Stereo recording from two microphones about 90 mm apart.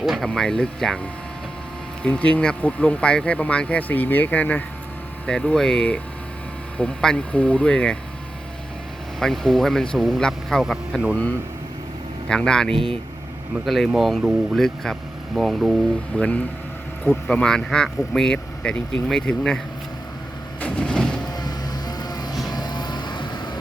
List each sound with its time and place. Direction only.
0.0 s speech: centre (ahead or behind)
2.0 s speech: 15° left (ahead or behind)
9.1 s speech: 5° left (ahead or behind)
12.3 s speech: 10° left (ahead or behind)
12.7 s speech: 85° right
13.9 s speech: centre (ahead or behind)
20.6 s vehicle: 15° left (ahead or behind)
21.3 s vehicle: 50° left (ahead or behind)